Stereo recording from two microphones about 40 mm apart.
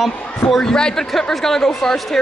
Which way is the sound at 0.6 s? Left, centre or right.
Centre.